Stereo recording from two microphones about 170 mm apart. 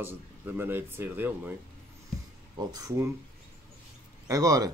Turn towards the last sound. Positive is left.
turn(degrees=-20)  # may be behind; listen again after turning